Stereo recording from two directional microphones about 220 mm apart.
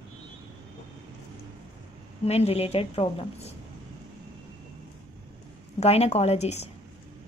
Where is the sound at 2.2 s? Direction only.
30° left (ahead or behind).